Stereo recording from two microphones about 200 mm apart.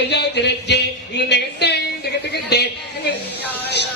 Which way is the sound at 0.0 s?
60° left (ahead or behind).